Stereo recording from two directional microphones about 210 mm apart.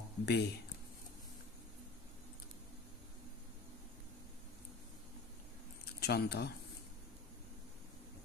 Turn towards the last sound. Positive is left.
turn(degrees=50)  # may be behind; listen again after turning